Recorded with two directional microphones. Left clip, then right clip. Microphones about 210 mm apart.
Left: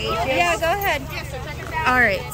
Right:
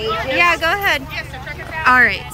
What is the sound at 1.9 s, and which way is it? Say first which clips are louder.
Speech: right 6 dB; 15° left (ahead or behind).